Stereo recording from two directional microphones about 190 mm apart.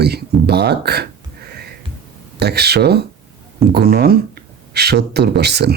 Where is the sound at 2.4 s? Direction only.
60° right (ahead or behind).